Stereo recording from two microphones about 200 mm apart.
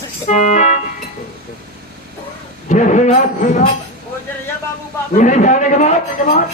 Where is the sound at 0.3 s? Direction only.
40° left (ahead or behind).